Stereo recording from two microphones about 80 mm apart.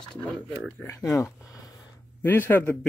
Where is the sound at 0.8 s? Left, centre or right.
Left.